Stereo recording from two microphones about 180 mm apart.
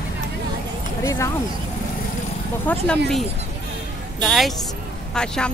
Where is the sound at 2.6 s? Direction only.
10° left (ahead or behind).